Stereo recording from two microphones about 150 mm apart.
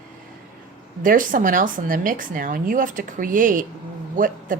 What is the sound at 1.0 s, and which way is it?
A woman's voice, 65° right (ahead or behind).